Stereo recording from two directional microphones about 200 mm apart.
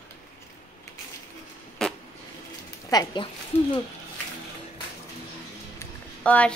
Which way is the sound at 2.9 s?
20° left (ahead or behind).